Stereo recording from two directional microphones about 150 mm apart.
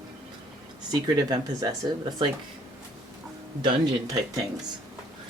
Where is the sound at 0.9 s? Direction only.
25° right (ahead or behind).